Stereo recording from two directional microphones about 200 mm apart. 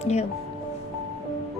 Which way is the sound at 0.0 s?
35° left (ahead or behind).